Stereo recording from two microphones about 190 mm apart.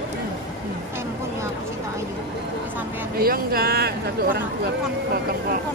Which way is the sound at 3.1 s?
50° right (ahead or behind).